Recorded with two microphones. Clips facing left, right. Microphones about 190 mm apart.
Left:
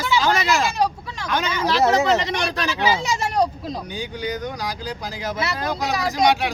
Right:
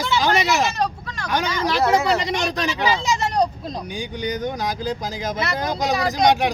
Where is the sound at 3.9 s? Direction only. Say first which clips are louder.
Right 3 dB; 15° right (ahead or behind).